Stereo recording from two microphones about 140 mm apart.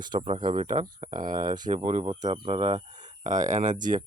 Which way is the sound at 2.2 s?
50° right (ahead or behind).